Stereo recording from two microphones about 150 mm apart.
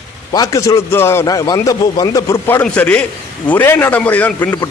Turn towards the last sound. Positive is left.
turn(degrees=10)  # may be behind; listen again after turning